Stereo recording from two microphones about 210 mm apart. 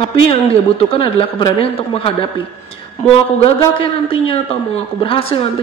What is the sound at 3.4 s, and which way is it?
Speech, 25° left (ahead or behind).